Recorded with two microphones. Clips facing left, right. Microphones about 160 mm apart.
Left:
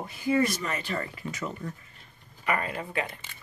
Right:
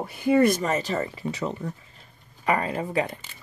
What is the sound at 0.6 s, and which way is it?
Speech, 35° right (ahead or behind).